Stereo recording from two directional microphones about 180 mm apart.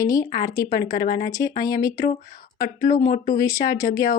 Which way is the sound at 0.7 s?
55° left (ahead or behind).